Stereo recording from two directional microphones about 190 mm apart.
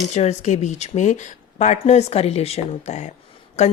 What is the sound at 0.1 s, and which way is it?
Speech, 35° left (ahead or behind).